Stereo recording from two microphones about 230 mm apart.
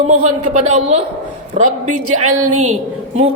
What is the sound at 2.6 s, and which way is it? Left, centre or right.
Speech, right.